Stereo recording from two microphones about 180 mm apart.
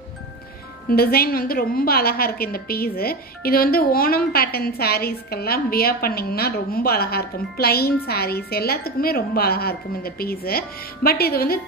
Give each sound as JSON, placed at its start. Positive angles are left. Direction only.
{"t": 0.8, "sound": "a woman's voice", "side_deg": 55}